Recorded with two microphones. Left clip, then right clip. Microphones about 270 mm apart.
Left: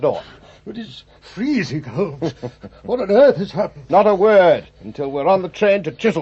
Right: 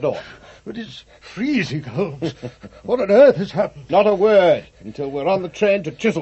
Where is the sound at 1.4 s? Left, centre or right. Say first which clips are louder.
Left 1 dB; right.